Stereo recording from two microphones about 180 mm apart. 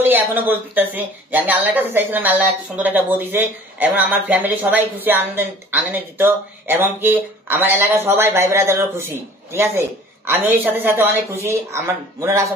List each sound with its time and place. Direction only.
0.0 s speech: 10° right (ahead or behind)